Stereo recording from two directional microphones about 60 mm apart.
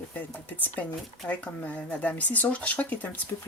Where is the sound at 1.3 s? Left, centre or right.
Left.